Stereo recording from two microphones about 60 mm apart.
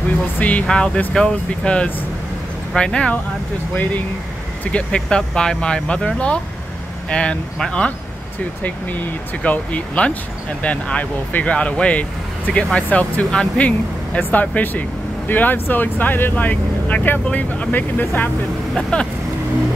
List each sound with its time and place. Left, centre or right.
0.4 s speech: left
4.7 s speech: centre
8.6 s speech: left
18.8 s speech: centre